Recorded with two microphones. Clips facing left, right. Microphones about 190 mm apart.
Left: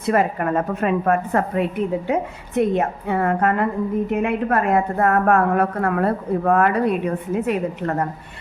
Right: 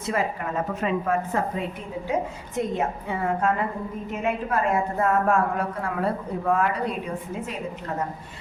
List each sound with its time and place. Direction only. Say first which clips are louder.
0.0 s a woman's voice: left 7 dB; 60° left (ahead or behind)